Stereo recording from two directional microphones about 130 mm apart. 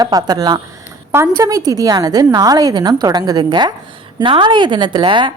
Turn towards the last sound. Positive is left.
turn(degrees=-40)  # may be behind; listen again after turning